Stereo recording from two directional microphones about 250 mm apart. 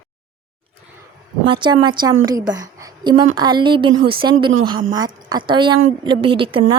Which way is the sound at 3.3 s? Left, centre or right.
Centre.